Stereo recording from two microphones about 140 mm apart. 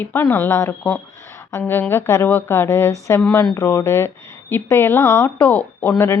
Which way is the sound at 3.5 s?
20° left (ahead or behind).